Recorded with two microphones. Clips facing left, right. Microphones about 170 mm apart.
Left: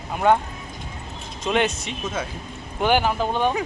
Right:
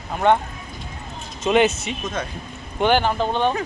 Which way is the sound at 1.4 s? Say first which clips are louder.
Right 5 dB; 5° right (ahead or behind).